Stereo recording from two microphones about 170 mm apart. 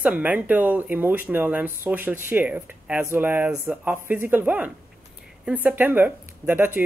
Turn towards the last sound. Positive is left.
turn(degrees=-10)  # may be behind; listen again after turning